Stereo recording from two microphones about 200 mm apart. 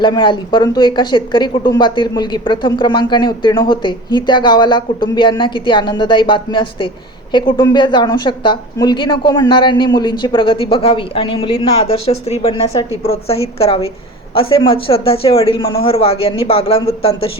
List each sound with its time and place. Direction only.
0.0 s speech: 25° left (ahead or behind)